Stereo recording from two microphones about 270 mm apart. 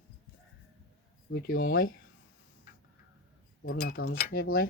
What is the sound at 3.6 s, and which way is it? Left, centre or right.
Speech, left.